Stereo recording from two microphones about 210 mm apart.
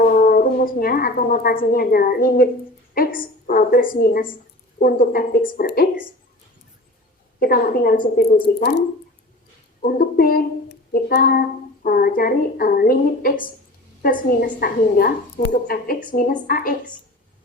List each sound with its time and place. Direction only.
0.0 s a woman's voice: 40° left (ahead or behind)
7.3 s a woman's voice: 45° left (ahead or behind)
9.8 s a woman's voice: 45° left (ahead or behind)